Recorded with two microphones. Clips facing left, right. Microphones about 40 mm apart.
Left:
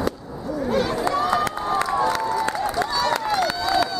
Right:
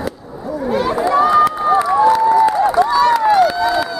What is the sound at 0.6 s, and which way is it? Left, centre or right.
Crowd, centre.